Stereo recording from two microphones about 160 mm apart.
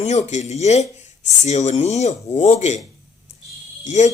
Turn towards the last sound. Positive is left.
turn(degrees=50)  # may be behind; listen again after turning